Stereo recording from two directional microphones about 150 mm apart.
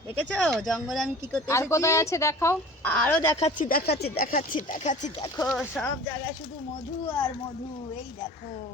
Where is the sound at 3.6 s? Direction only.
70° left (ahead or behind); by 5.1 s 55° left (ahead or behind).